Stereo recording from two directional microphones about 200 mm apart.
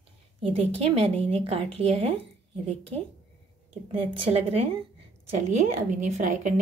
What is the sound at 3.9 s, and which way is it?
A woman's voice, 25° right (ahead or behind).